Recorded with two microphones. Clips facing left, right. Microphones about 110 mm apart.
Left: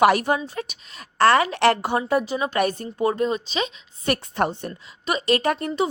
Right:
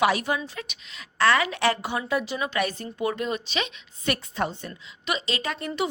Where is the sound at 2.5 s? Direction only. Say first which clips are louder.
Left 5 dB; 45° left (ahead or behind).